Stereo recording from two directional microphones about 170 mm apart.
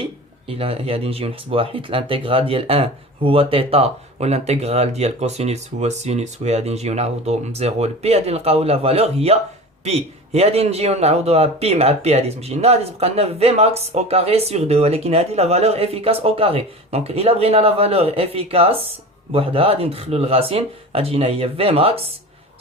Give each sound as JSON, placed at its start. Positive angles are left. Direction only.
{"t": 0.0, "sound": "a man's voice", "side_deg": -35}